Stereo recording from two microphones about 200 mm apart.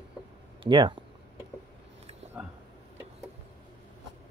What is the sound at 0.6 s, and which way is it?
Speech, 25° right (ahead or behind).